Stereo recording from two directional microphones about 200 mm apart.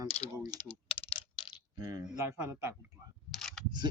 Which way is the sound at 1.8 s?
20° right (ahead or behind).